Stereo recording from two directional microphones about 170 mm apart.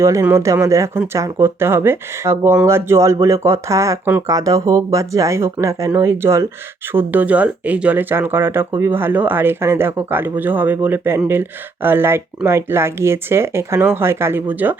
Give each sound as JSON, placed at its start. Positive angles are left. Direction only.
{"t": 0.0, "sound": "speech", "side_deg": -15}